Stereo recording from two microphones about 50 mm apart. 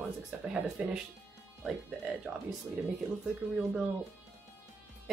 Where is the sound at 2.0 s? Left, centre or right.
Right.